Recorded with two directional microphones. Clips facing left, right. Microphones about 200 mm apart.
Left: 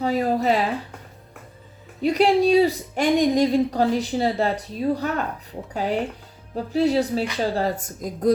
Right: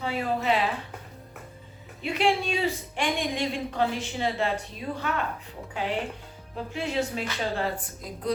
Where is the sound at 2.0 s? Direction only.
40° left (ahead or behind).